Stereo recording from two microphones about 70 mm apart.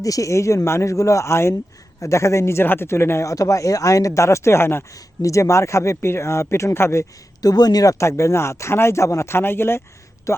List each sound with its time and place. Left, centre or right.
0.0 s speech: left
5.2 s speech: left
7.4 s speech: left
7.9 s speech: left